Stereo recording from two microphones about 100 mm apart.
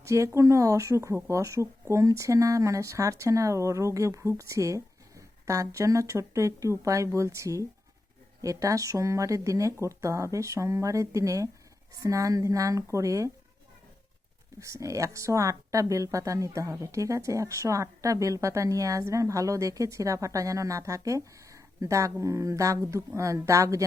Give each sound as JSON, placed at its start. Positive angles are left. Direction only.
{"t": 0.0, "sound": "speech", "side_deg": -30}
{"t": 14.6, "sound": "speech", "side_deg": -30}